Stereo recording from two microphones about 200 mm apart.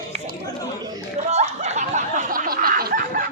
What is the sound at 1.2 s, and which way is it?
Snicker, 35° right (ahead or behind).